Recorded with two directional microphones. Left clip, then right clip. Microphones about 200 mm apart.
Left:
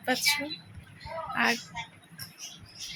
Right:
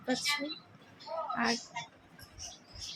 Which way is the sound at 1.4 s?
5° right (ahead or behind).